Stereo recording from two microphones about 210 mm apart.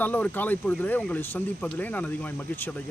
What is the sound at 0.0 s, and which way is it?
Speech, 10° left (ahead or behind).